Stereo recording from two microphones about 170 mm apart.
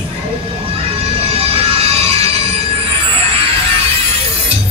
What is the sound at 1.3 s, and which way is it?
Music, 35° right (ahead or behind).